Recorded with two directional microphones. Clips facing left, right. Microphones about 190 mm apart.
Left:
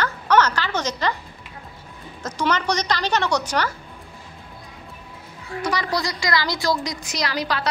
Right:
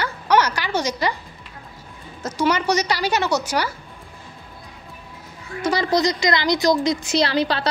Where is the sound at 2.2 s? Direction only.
10° right (ahead or behind).